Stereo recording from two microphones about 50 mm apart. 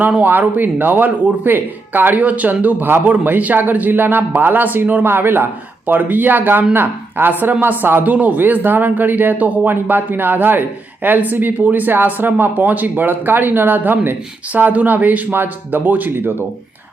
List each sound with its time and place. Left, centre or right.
0.2 s speech: right
5.0 s a woman's voice: right
5.8 s a woman's voice: right